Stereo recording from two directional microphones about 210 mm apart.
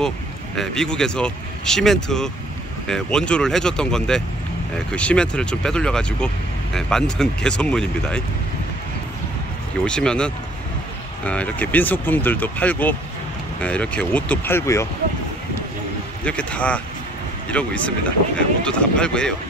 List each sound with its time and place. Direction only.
0.6 s speech: 5° left (ahead or behind)
9.8 s speech: 5° left (ahead or behind)
16.3 s speech: 5° left (ahead or behind)